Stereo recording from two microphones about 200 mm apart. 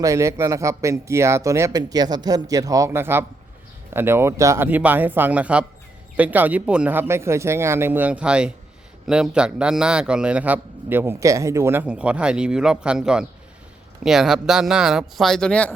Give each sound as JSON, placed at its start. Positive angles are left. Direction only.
{"t": 0.0, "sound": "a man's voice", "side_deg": -15}